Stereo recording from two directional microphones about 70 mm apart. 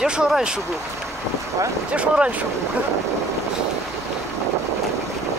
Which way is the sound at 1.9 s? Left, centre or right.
Centre.